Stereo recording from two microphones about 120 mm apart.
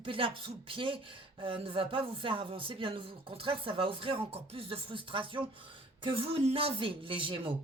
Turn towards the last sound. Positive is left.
turn(degrees=-45)  # may be behind; listen again after turning